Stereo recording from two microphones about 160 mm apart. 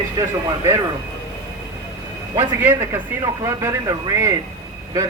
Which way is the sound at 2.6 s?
15° right (ahead or behind).